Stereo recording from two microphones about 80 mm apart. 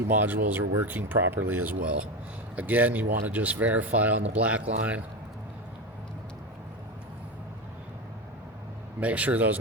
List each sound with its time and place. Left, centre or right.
0.1 s speech: right
9.0 s speech: centre